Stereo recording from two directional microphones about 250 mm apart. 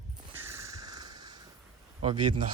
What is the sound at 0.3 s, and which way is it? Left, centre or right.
Crow, centre.